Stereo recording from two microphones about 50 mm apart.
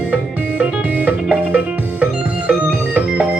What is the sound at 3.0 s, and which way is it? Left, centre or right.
Music, right.